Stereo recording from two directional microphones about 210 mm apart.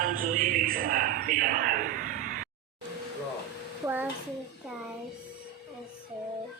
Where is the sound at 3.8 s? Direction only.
10° right (ahead or behind).